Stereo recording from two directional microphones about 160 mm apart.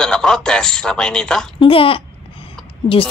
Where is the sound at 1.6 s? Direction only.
35° left (ahead or behind).